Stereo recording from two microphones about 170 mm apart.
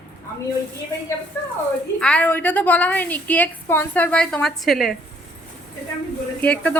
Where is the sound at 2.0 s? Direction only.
5° left (ahead or behind).